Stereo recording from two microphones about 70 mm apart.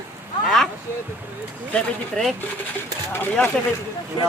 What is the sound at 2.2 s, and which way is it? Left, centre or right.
Speech, centre.